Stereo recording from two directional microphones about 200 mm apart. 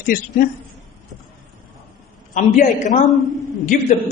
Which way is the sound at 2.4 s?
40° left (ahead or behind).